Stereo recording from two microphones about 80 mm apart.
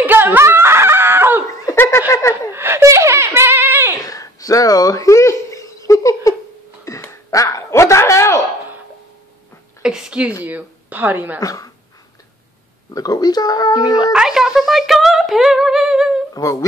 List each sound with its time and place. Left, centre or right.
0.0 s snicker: right
1.8 s snicker: left
2.5 s wail: right
4.0 s a sound: left
9.8 s a sound: centre
10.4 s speech: right
11.3 s speech: left
12.9 s speech: left
14.1 s a sound: centre
16.3 s speech: left